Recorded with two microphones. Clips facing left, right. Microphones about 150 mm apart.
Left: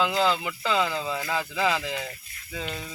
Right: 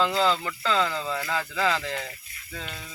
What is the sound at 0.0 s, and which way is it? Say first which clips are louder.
Speech: even; 5° left (ahead or behind).